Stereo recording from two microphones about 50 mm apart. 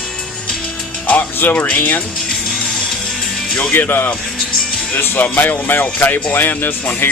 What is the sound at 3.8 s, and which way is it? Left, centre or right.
Speech, left.